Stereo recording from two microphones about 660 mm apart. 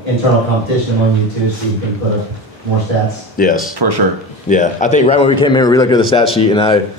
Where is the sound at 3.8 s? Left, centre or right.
Right.